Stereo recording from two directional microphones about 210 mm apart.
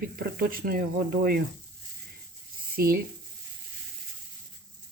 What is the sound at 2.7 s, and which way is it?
Speech, 45° right (ahead or behind).